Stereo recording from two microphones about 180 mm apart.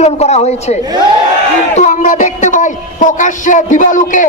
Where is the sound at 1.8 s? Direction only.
40° left (ahead or behind).